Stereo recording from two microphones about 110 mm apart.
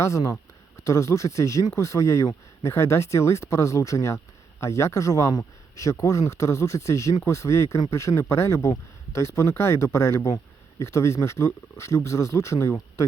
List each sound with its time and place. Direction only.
0.0 s speech: 30° left (ahead or behind)